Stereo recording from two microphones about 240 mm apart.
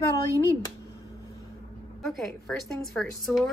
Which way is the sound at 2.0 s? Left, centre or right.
Centre.